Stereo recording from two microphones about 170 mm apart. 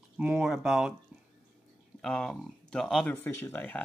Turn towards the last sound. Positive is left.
turn(degrees=10)  # may be behind; listen again after turning